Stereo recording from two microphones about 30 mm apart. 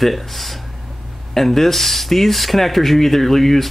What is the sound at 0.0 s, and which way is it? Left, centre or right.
Speech, centre.